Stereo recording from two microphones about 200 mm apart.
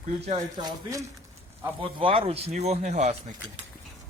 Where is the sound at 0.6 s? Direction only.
20° right (ahead or behind); by 3.1 s 35° right (ahead or behind).